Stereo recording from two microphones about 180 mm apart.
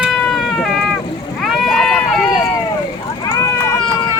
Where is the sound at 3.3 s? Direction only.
15° left (ahead or behind).